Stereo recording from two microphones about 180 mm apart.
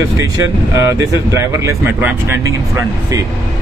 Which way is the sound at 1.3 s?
15° right (ahead or behind).